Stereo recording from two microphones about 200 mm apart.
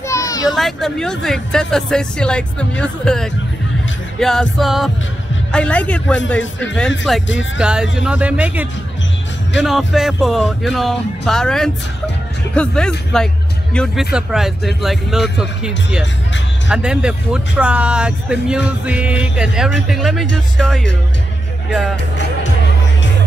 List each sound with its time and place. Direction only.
0.1 s a sound: 15° left (ahead or behind)
0.6 s speech: centre (ahead or behind)
9.7 s speech: centre (ahead or behind)